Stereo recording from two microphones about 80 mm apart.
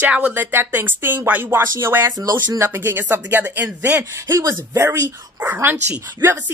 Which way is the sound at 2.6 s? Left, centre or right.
Right.